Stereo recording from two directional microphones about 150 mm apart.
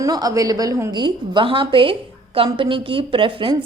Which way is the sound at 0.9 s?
30° right (ahead or behind).